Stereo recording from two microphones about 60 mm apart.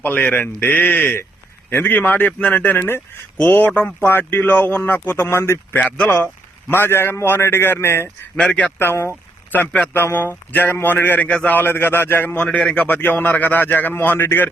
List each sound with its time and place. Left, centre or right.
0.0 s a man's voice: left
2.7 s a man's voice: left
3.4 s a man's voice: left
8.4 s a man's voice: centre
8.8 s speech: left
9.5 s a man's voice: left
9.9 s a man's voice: left
12.5 s a man's voice: left